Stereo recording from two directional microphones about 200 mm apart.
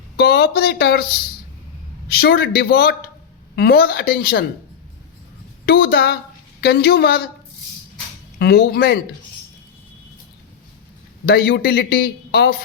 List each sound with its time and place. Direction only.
0.2 s a man's voice: 55° left (ahead or behind)
2.1 s a man's voice: 55° left (ahead or behind)
5.6 s a man's voice: 50° left (ahead or behind)
8.4 s a man's voice: 50° left (ahead or behind)
11.3 s a man's voice: 55° left (ahead or behind)